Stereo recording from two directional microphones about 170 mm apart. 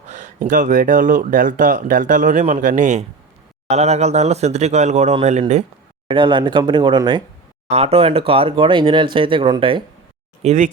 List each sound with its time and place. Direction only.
0.1 s speech: 50° right (ahead or behind)
6.1 s speech: 30° right (ahead or behind)
7.7 s speech: 35° right (ahead or behind)
10.4 s speech: 45° right (ahead or behind)